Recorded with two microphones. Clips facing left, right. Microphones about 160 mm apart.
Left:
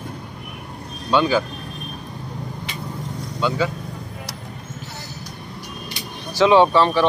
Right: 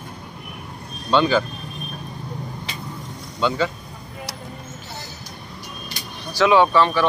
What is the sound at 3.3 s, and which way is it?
Speech, 5° left (ahead or behind).